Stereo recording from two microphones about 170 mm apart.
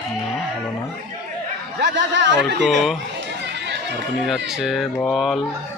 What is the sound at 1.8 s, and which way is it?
Speech, 90° right.